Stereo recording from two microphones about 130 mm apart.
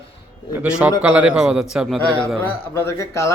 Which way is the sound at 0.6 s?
10° right (ahead or behind).